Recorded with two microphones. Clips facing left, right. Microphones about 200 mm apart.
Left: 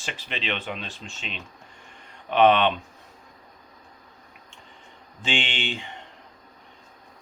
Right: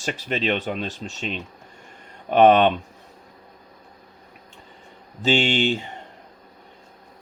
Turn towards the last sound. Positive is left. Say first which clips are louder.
# right 10 dB
turn(degrees=-40)  # may be behind; listen again after turning